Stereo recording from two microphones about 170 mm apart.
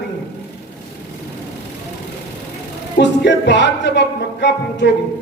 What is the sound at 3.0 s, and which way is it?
Music, 90° left.